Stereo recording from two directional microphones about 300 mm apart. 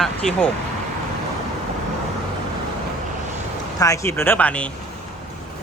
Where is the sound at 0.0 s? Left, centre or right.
Centre.